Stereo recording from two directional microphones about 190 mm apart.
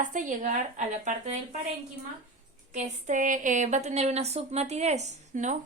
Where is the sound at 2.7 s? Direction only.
40° right (ahead or behind).